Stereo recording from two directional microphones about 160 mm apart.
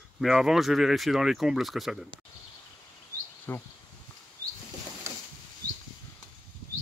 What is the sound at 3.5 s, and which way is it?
Speech, 15° left (ahead or behind).